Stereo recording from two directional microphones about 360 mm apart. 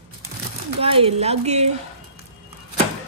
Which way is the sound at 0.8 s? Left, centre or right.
Centre.